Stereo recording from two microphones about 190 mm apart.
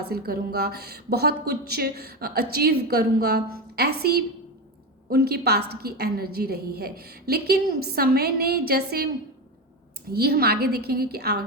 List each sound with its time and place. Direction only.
0.0 s a woman's voice: 55° right (ahead or behind)
10.1 s a woman's voice: 55° right (ahead or behind)